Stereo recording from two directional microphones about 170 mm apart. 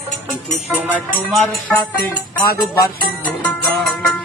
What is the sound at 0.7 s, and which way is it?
Music, 10° right (ahead or behind).